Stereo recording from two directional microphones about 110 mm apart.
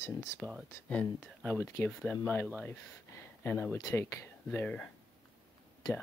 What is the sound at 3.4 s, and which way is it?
Speech, 15° left (ahead or behind).